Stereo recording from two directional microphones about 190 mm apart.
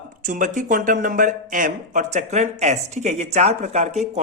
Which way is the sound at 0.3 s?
45° right (ahead or behind).